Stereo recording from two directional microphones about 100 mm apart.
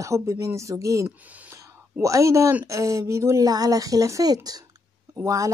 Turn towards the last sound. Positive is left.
turn(degrees=-35)  # may be behind; listen again after turning